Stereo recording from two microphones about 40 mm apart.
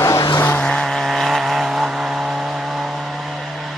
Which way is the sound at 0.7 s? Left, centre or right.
Centre.